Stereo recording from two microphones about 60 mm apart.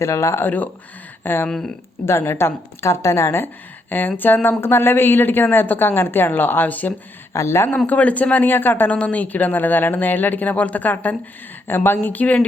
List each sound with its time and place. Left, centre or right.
0.0 s speech: left
0.3 s a woman's voice: left
1.5 s speech: centre
2.0 s a woman's voice: left
7.3 s a woman's voice: left
7.9 s speech: left
9.0 s a woman's voice: left